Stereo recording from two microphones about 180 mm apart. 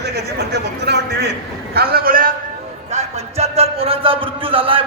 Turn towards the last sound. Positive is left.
turn(degrees=-30)  # may be behind; listen again after turning